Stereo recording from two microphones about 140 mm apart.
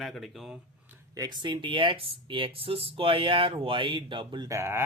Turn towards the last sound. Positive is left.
turn(degrees=-20)  # may be behind; listen again after turning